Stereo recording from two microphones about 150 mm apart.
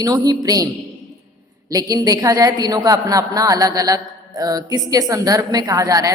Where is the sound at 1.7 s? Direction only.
25° right (ahead or behind).